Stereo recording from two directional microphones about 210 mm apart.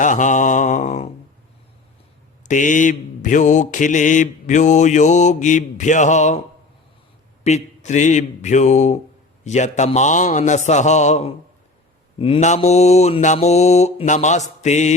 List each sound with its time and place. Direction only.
0.0 s mantra: 35° left (ahead or behind)
2.5 s mantra: 35° left (ahead or behind)
7.5 s mantra: 30° left (ahead or behind)